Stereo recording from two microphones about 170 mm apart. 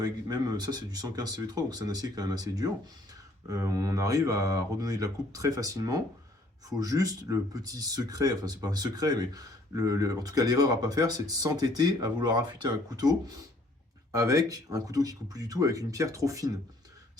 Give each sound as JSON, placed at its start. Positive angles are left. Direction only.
{"t": 0.0, "sound": "speech", "side_deg": -25}